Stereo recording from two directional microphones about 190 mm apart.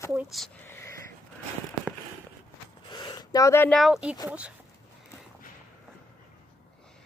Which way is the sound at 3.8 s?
5° right (ahead or behind).